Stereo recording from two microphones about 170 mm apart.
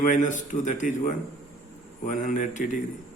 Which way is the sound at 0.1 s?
50° left (ahead or behind).